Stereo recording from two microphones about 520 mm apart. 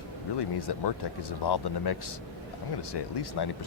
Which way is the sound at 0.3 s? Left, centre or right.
Left.